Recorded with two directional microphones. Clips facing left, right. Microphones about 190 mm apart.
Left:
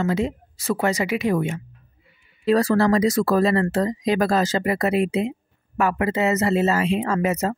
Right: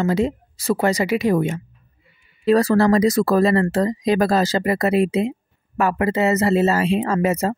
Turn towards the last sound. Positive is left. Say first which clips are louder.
# right 2 dB
turn(degrees=-35)  # may be behind; listen again after turning